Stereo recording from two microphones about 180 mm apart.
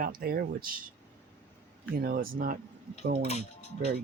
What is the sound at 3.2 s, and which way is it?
Speech, 35° left (ahead or behind).